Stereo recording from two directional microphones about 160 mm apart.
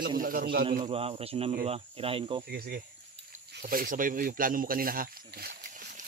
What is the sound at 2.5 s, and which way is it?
Speech, 75° right (ahead or behind).